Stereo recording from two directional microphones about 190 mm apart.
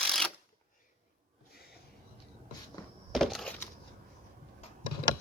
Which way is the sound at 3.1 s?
Centre (ahead or behind).